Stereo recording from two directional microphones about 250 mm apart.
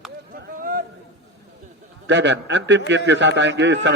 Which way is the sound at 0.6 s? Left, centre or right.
Right.